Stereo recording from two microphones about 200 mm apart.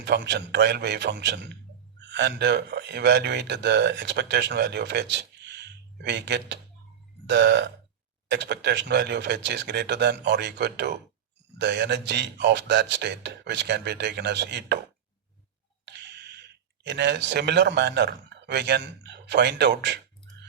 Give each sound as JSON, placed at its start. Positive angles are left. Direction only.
{"t": 0.0, "sound": "a man's voice", "side_deg": -60}
{"t": 15.9, "sound": "a sound", "side_deg": -55}
{"t": 16.8, "sound": "speech", "side_deg": -60}